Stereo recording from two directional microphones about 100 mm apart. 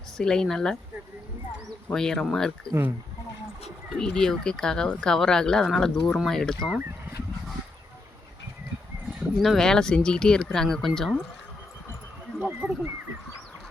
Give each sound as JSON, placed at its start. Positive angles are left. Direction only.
{"t": 0.2, "sound": "speech", "side_deg": 5}
{"t": 1.9, "sound": "speech", "side_deg": 5}
{"t": 3.8, "sound": "speech", "side_deg": 5}
{"t": 9.1, "sound": "speech", "side_deg": 0}
{"t": 12.4, "sound": "speech", "side_deg": -15}